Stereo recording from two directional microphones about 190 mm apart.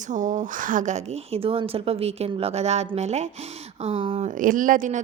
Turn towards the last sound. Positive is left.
turn(degrees=-45)  # may be behind; listen again after turning